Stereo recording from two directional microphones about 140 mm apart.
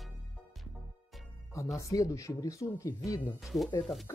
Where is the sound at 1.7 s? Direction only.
20° left (ahead or behind).